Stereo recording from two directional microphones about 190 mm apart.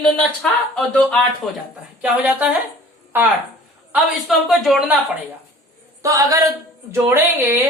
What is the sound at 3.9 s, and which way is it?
Speech, centre (ahead or behind).